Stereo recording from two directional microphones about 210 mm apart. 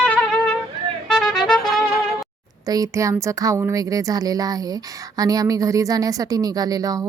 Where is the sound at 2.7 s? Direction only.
15° right (ahead or behind).